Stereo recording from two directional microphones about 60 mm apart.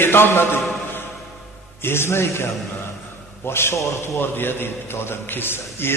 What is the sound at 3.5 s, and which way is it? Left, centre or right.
Speech, left.